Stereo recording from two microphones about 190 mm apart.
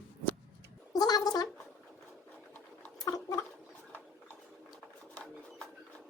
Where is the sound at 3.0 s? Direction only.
20° left (ahead or behind).